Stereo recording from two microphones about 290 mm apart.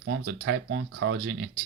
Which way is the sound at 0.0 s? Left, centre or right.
Right.